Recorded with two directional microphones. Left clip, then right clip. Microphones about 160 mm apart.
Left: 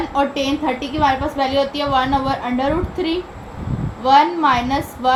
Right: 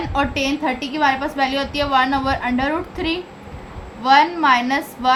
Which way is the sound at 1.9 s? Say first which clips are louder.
Right 4 dB; 45° right (ahead or behind).